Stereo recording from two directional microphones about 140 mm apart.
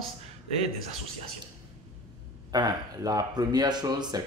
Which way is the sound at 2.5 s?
30° right (ahead or behind).